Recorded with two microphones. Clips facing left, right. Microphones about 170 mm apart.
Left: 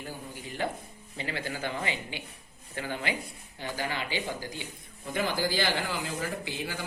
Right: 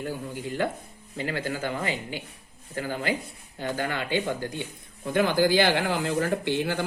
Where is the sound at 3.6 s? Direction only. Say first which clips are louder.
Right 5 dB; 55° right (ahead or behind).